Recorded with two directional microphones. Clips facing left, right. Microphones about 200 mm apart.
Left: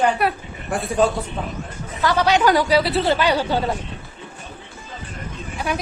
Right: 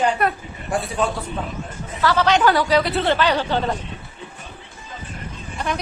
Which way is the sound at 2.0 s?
15° left (ahead or behind).